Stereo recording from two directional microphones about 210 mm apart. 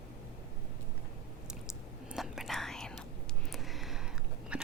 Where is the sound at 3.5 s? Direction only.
Centre (ahead or behind).